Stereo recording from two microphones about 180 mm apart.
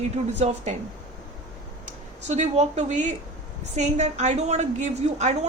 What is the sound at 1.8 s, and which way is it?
A woman's voice, 40° right (ahead or behind).